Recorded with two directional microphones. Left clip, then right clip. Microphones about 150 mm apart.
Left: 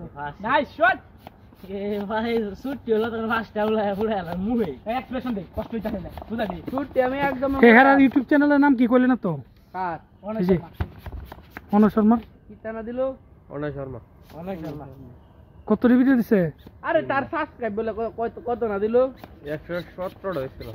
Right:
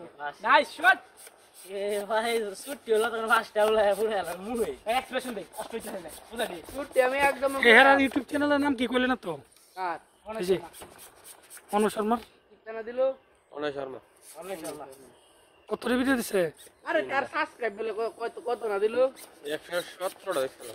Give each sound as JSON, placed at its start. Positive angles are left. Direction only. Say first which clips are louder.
{"t": 0.4, "sound": "speech", "louder": "left 2 dB", "side_deg": 5}
{"t": 1.7, "sound": "speech", "louder": "left 1 dB", "side_deg": -20}
{"t": 4.8, "sound": "speech", "louder": "even", "side_deg": 5}
{"t": 6.8, "sound": "a woman's voice", "louder": "left 1 dB", "side_deg": 50}
{"t": 7.6, "sound": "speech", "louder": "left 4 dB", "side_deg": 5}
{"t": 12.7, "sound": "a woman's voice", "louder": "even", "side_deg": 50}
{"t": 13.6, "sound": "a man's voice", "louder": "left 2 dB", "side_deg": -50}
{"t": 14.3, "sound": "speech", "louder": "left 4 dB", "side_deg": -15}
{"t": 16.8, "sound": "a woman's voice", "louder": "left 5 dB", "side_deg": 50}
{"t": 19.5, "sound": "speech", "louder": "left 2 dB", "side_deg": -55}